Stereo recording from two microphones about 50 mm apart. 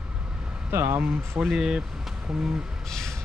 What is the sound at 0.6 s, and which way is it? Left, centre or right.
Speech, right.